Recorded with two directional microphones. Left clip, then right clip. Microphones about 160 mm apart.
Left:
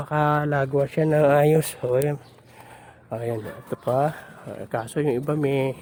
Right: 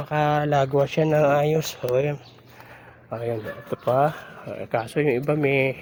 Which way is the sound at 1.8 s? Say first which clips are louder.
Even; 30° left (ahead or behind).